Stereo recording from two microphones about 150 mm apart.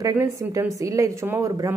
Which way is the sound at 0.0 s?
15° right (ahead or behind).